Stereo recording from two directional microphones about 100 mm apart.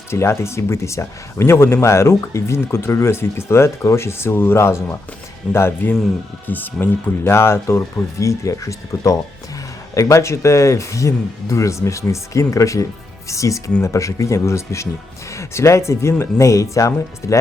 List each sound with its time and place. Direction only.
0.1 s speech: 25° left (ahead or behind)